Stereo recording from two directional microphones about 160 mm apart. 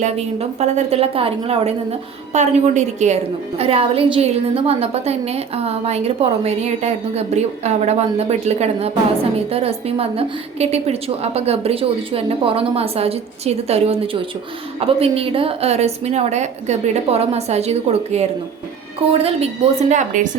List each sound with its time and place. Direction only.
0.0 s a woman's voice: 40° right (ahead or behind)
19.9 s a woman's voice: 50° right (ahead or behind)